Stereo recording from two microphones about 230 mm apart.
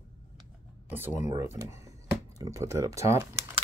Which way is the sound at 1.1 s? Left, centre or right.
Left.